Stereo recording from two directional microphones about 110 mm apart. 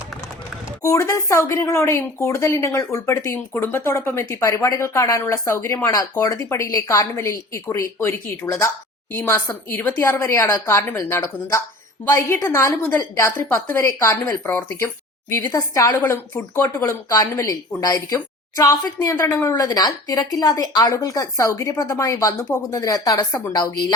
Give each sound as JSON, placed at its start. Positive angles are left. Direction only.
{"t": 0.8, "sound": "a woman's voice", "side_deg": 30}